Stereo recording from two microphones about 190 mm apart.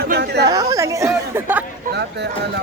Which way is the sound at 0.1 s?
55° right (ahead or behind).